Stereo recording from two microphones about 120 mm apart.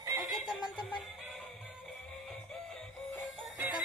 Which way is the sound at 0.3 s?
Centre (ahead or behind).